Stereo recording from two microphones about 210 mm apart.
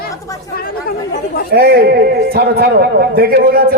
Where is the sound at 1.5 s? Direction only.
50° right (ahead or behind).